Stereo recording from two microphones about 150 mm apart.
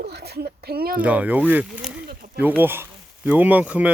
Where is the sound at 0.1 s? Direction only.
90° right.